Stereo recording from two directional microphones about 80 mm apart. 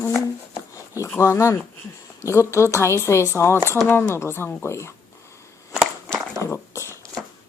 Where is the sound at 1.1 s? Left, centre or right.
Left.